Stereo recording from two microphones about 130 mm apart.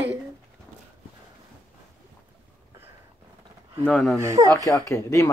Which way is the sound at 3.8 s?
5° left (ahead or behind).